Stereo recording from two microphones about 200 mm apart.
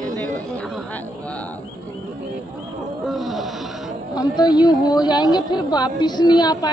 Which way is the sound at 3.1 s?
Centre (ahead or behind).